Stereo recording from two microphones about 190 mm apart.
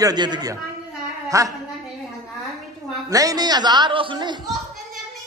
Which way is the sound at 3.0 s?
20° right (ahead or behind).